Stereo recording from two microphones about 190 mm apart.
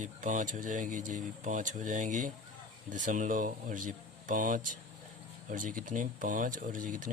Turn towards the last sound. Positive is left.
turn(degrees=-45)  # may be behind; listen again after turning